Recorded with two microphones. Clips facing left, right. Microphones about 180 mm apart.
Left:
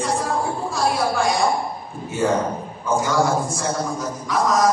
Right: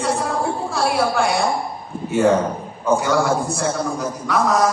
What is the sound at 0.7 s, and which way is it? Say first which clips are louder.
Speech: right 1 dB; 65° right (ahead or behind).